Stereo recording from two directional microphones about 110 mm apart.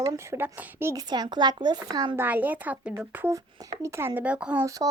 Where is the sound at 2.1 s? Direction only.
15° right (ahead or behind).